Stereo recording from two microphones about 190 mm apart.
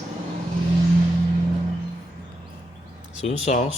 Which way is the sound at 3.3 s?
35° left (ahead or behind).